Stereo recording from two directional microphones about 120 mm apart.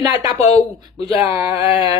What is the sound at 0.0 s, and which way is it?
Speech, 30° right (ahead or behind).